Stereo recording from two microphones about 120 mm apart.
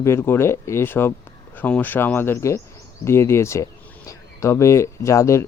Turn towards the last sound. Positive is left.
turn(degrees=25)  # may be behind; listen again after turning